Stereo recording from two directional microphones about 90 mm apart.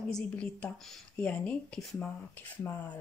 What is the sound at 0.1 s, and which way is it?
Speech, 15° left (ahead or behind).